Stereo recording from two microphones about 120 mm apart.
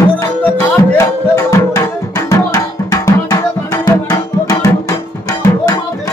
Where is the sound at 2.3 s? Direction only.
30° left (ahead or behind).